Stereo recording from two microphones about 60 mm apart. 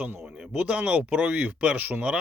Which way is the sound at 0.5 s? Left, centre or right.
Right.